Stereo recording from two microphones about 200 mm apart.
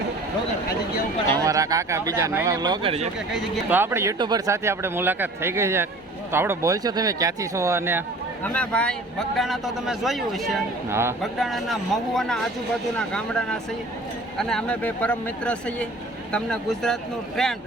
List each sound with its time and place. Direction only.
1.4 s speech: 15° right (ahead or behind)
3.3 s speech: 10° right (ahead or behind)
8.4 s a man's voice: 5° left (ahead or behind)
10.8 s speech: 10° right (ahead or behind)
11.2 s a man's voice: centre (ahead or behind)